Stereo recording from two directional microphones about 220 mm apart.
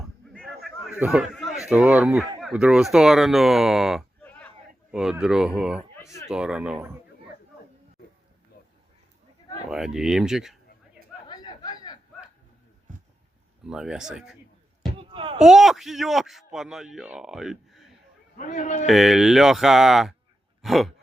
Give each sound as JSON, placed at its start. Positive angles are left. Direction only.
{"t": 0.3, "sound": "a sound", "side_deg": 0}
{"t": 1.6, "sound": "a man's voice", "side_deg": -5}
{"t": 6.0, "sound": "a sound", "side_deg": 15}
{"t": 6.2, "sound": "a man's voice", "side_deg": -5}
{"t": 9.6, "sound": "a man's voice", "side_deg": 0}
{"t": 11.3, "sound": "chatter", "side_deg": 20}
{"t": 13.7, "sound": "a man's voice", "side_deg": -5}
{"t": 14.9, "sound": "a sound", "side_deg": -25}
{"t": 15.4, "sound": "a man's voice", "side_deg": 0}
{"t": 18.3, "sound": "a man's voice", "side_deg": 35}
{"t": 18.9, "sound": "a man's voice", "side_deg": 0}
{"t": 20.6, "sound": "a sound", "side_deg": 0}